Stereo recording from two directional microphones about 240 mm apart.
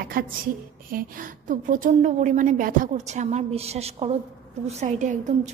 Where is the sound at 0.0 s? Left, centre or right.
Right.